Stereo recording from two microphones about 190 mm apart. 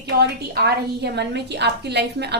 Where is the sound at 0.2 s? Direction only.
60° right (ahead or behind).